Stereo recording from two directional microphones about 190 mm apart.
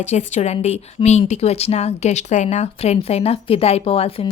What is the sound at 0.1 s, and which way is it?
Speech, 35° left (ahead or behind).